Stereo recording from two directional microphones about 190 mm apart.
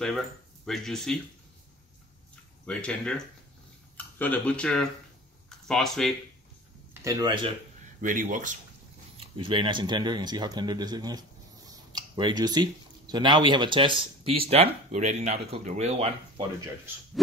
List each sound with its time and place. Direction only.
0.7 s speech: centre (ahead or behind)
2.6 s speech: 5° left (ahead or behind)
6.9 s speech: 15° right (ahead or behind)
8.0 s speech: 45° right (ahead or behind)
9.2 s speech: 25° right (ahead or behind)